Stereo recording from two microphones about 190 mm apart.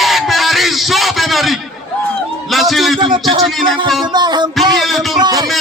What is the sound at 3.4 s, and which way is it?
Speech, centre (ahead or behind).